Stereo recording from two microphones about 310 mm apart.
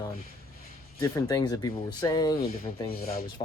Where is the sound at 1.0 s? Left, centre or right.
Centre.